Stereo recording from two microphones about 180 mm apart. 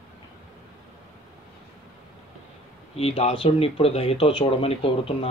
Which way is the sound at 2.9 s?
35° left (ahead or behind).